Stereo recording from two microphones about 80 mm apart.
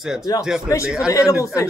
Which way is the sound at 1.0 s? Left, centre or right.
Left.